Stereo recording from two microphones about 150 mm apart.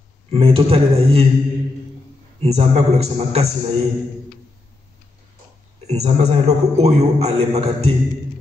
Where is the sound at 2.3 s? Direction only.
45° right (ahead or behind).